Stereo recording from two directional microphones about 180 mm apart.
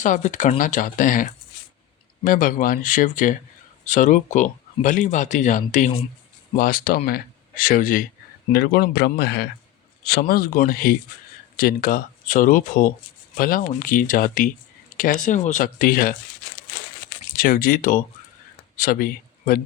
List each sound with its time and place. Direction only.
0.0 s a man's voice: 45° left (ahead or behind)
17.3 s speech: 50° left (ahead or behind)